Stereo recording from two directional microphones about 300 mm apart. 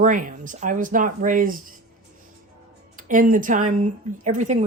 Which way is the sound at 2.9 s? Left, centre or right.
Right.